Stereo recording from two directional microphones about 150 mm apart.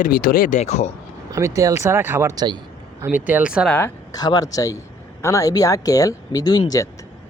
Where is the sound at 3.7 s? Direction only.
15° left (ahead or behind).